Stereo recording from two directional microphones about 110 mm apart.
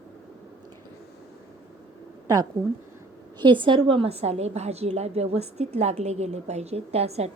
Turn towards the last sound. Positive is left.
turn(degrees=-75)  # may be behind; listen again after turning